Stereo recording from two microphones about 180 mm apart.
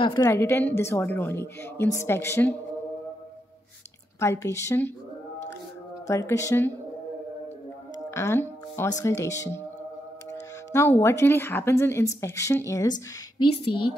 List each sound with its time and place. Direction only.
0.0 s speech: 20° left (ahead or behind)
4.2 s speech: 15° left (ahead or behind)
6.0 s speech: 15° left (ahead or behind)
8.1 s speech: 15° left (ahead or behind)